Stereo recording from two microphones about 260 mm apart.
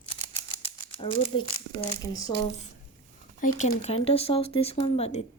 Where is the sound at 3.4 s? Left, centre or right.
Left.